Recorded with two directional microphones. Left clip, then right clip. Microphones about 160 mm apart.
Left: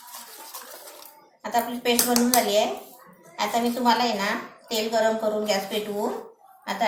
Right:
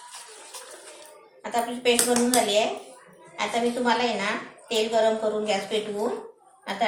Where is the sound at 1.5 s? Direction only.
25° right (ahead or behind).